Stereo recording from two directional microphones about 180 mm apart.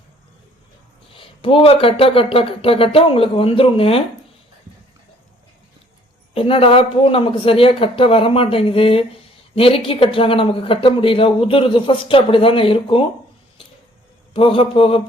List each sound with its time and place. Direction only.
1.1 s speech: 30° left (ahead or behind)
6.3 s speech: 30° left (ahead or behind)
14.3 s speech: 30° left (ahead or behind)